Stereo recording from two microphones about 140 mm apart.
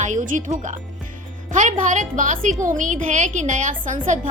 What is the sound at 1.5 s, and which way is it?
A woman's voice, 65° right (ahead or behind).